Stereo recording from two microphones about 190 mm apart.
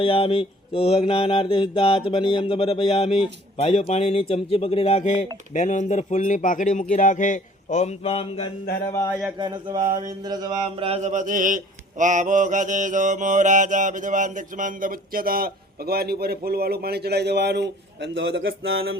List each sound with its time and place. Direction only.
0.0 s mantra: 30° left (ahead or behind)
3.6 s a man's voice: 35° left (ahead or behind)
9.4 s a sound: 20° right (ahead or behind)
10.2 s mantra: 20° right (ahead or behind); by 18.9 s 90° right